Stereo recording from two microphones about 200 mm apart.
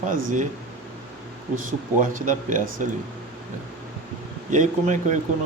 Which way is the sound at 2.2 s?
40° right (ahead or behind).